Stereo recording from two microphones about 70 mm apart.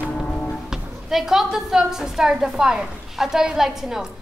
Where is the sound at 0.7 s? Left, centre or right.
Centre.